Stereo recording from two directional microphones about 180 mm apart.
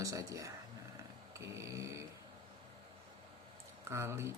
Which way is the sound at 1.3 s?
15° right (ahead or behind).